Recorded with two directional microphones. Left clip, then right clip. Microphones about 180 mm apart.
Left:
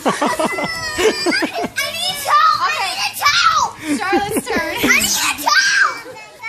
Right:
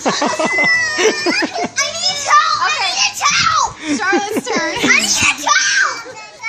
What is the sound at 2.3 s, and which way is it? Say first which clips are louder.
Children playing: right 2 dB; 35° left (ahead or behind).